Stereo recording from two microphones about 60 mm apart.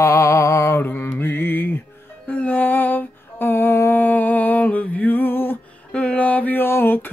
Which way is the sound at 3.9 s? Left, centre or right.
Left.